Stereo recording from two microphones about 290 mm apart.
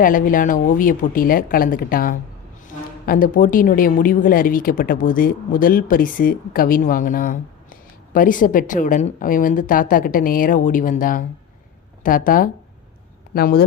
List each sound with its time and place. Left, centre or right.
0.0 s a woman's voice: left